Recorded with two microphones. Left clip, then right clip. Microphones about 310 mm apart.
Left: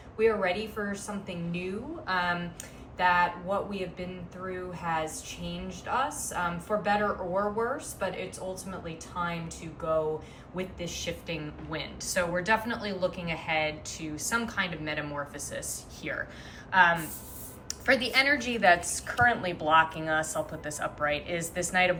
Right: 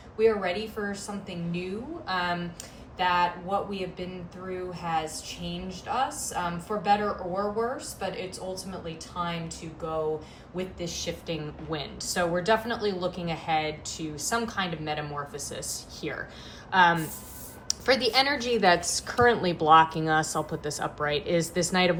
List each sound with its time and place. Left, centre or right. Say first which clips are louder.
0.2 s speech: right 2 dB; centre
10.5 s a woman's voice: right 2 dB; centre
17.7 s a woman's voice: right 2 dB; centre